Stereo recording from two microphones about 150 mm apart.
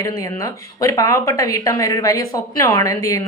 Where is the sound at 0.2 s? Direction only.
20° left (ahead or behind).